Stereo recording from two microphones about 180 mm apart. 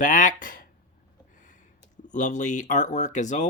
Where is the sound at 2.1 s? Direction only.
45° left (ahead or behind).